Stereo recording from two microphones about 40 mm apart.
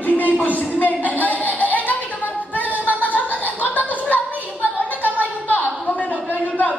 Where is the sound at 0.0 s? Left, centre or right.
Left.